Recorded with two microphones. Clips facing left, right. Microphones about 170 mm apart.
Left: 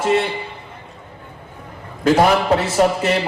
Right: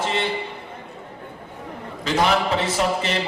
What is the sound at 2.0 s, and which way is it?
Speech, 50° left (ahead or behind).